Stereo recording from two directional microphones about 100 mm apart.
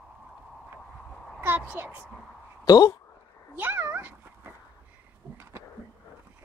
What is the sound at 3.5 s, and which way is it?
Dog, 20° right (ahead or behind).